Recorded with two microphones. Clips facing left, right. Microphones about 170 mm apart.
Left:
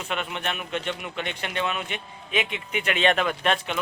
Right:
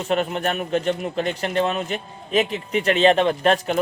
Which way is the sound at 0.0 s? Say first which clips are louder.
Right 8 dB; 40° right (ahead or behind).